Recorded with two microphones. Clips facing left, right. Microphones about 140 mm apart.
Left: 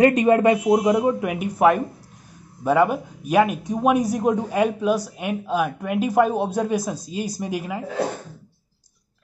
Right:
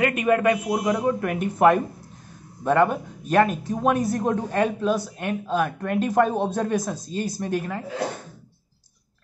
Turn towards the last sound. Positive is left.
turn(degrees=10)  # may be behind; listen again after turning